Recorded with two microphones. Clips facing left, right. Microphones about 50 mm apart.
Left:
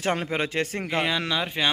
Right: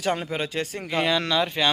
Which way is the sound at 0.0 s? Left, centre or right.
Left.